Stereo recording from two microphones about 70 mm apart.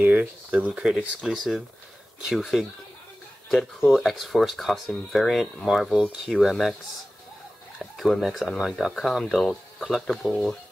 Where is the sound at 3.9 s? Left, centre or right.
Centre.